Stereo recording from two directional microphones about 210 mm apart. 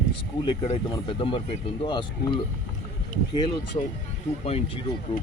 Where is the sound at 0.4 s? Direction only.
25° left (ahead or behind).